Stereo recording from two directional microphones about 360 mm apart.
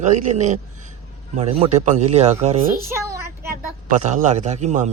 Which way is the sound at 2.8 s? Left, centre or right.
Centre.